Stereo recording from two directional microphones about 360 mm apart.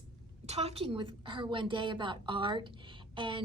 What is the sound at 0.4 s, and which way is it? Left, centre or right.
A woman's voice, centre.